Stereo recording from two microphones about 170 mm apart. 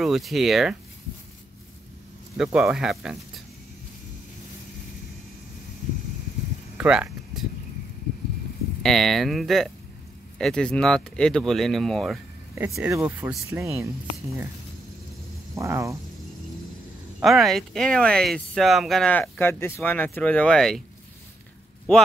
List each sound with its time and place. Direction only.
0.0 s speech: centre (ahead or behind)
2.3 s speech: 5° right (ahead or behind)
6.8 s a sound: 5° right (ahead or behind)
8.8 s speech: centre (ahead or behind)
12.9 s speech: 15° right (ahead or behind)
15.5 s speech: 15° right (ahead or behind)
17.2 s speech: centre (ahead or behind)